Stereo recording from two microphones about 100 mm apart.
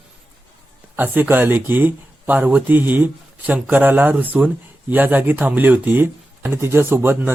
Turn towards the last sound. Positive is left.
turn(degrees=-20)  # may be behind; listen again after turning